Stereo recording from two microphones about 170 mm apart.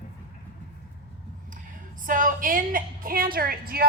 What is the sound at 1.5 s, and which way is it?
A woman's voice, 50° right (ahead or behind).